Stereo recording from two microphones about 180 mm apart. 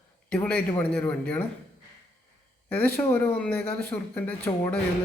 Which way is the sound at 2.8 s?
10° left (ahead or behind).